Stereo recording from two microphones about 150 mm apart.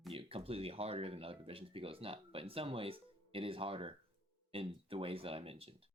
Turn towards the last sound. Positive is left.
turn(degrees=-40)  # may be behind; listen again after turning